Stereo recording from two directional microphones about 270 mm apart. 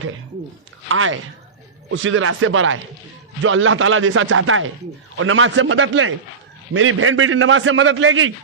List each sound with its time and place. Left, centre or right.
0.9 s a man's voice: right